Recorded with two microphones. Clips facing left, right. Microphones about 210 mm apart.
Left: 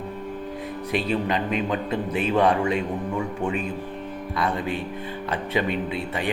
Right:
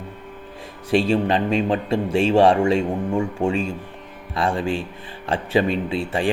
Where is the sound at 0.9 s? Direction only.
30° right (ahead or behind).